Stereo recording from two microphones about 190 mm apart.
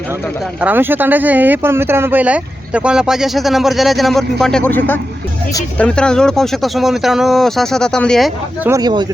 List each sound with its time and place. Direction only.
0.6 s speech: 10° right (ahead or behind)
8.6 s speech: 20° right (ahead or behind)